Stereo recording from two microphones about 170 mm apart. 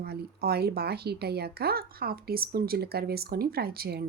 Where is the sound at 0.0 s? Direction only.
65° right (ahead or behind).